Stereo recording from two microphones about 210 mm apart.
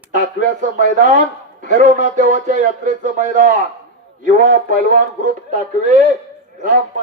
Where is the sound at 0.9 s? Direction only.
35° right (ahead or behind).